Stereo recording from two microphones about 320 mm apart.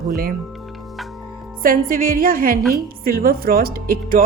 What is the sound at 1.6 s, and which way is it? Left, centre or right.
A woman's voice, right.